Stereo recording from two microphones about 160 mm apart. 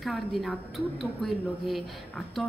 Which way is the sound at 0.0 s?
Centre (ahead or behind).